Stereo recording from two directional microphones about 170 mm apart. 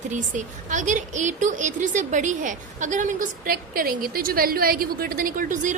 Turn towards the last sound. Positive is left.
turn(degrees=-50)  # may be behind; listen again after turning